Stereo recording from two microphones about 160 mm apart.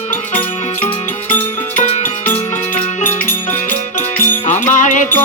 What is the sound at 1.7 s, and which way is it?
Music, 50° left (ahead or behind).